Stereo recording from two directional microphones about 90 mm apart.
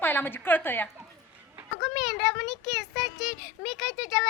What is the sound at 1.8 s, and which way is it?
A woman's voice, centre (ahead or behind).